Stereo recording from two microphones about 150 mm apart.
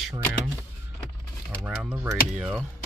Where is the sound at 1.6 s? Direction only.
10° right (ahead or behind).